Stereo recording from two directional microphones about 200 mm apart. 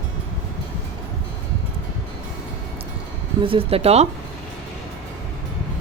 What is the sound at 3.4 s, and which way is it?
Speech, 25° right (ahead or behind).